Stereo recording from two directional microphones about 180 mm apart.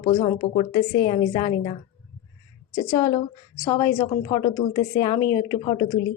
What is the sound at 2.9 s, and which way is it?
A woman's voice, 25° left (ahead or behind).